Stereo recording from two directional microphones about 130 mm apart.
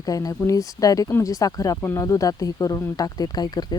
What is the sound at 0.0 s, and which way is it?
Speech, 30° left (ahead or behind).